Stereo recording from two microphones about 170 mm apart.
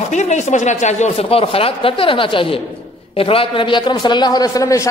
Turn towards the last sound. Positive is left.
turn(degrees=20)  # may be behind; listen again after turning